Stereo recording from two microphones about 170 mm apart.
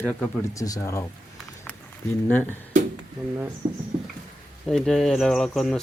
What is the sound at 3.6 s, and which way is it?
Speech, 30° right (ahead or behind).